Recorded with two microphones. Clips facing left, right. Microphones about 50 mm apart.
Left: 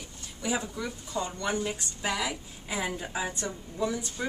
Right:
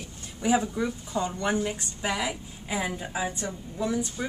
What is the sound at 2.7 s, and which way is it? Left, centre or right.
A woman's voice, centre.